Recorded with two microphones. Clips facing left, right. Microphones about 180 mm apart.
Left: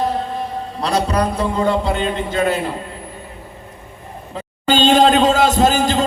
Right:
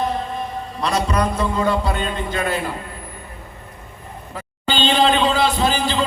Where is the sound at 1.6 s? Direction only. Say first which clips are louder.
Left 3 dB; 20° left (ahead or behind).